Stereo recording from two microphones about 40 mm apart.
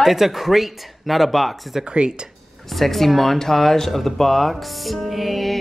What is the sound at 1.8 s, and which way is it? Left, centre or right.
Speech, right.